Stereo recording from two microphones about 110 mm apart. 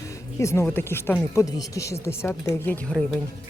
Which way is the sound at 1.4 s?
35° left (ahead or behind).